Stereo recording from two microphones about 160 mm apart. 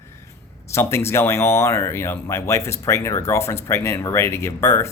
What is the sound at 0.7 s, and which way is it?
Speech, 15° left (ahead or behind).